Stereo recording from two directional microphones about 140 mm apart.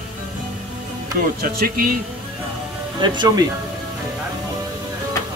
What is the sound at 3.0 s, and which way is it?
Speech, 30° right (ahead or behind).